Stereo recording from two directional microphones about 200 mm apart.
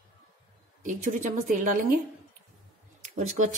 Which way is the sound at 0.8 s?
40° right (ahead or behind).